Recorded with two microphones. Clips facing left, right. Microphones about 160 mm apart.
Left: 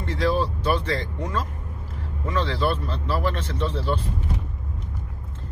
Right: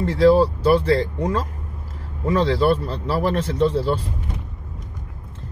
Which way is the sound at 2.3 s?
40° right (ahead or behind).